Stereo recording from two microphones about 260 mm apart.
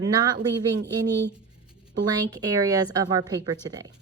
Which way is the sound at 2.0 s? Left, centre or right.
Centre.